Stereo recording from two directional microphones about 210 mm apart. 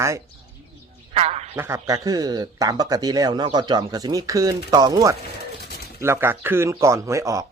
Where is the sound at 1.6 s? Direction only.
15° right (ahead or behind).